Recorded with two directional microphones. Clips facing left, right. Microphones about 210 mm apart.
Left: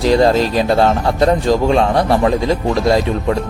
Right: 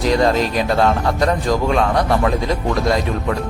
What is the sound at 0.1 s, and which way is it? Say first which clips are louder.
A man's voice: left 4 dB; 30° left (ahead or behind).